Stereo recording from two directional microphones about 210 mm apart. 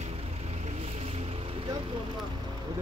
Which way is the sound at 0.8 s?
30° right (ahead or behind).